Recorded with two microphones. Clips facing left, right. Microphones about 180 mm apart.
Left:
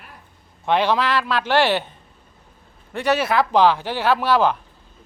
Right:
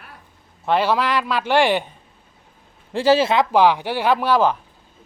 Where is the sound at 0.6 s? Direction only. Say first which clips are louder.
Even; 5° right (ahead or behind).